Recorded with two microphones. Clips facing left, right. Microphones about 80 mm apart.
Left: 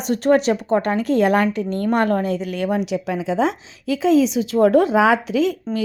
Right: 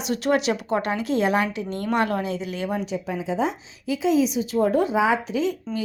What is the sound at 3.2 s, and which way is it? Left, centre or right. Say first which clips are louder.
A woman's voice: left 4 dB; left.